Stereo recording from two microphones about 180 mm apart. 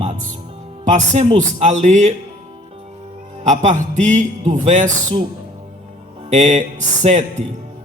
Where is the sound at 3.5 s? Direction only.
40° right (ahead or behind).